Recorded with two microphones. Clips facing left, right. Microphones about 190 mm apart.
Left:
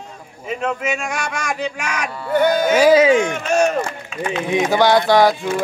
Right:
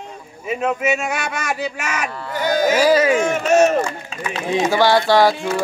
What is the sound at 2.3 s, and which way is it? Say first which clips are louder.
Speech: left 3 dB; 55° left (ahead or behind).